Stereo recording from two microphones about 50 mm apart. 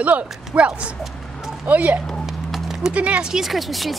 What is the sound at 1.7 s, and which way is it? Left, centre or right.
Speech, right.